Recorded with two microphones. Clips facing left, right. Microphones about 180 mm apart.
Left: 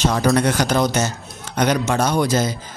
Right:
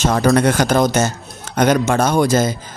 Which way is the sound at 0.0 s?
55° right (ahead or behind).